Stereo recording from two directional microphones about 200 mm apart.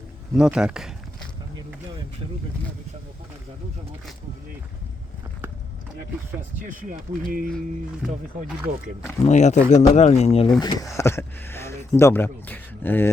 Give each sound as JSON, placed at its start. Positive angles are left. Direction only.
{"t": 0.3, "sound": "speech", "side_deg": -5}
{"t": 6.7, "sound": "speech", "side_deg": -45}
{"t": 8.4, "sound": "speech", "side_deg": -5}
{"t": 9.2, "sound": "speech", "side_deg": 35}
{"t": 10.6, "sound": "speech", "side_deg": 15}